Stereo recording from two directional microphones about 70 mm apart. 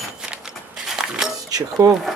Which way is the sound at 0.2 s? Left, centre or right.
Centre.